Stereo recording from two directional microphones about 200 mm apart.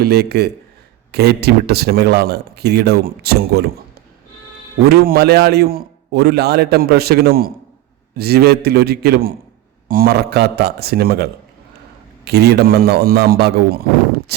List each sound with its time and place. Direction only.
0.0 s a man's voice: 55° right (ahead or behind)
4.9 s a man's voice: 50° right (ahead or behind)